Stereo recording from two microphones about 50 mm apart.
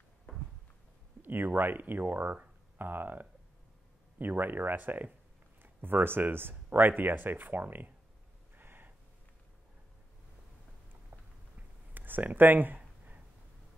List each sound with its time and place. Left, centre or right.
1.2 s speech: right
8.5 s gasp: right
11.9 s a sound: right